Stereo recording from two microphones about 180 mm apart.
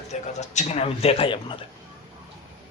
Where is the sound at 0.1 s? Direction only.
40° left (ahead or behind).